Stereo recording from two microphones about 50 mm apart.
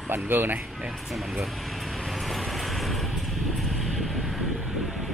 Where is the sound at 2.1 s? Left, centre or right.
Centre.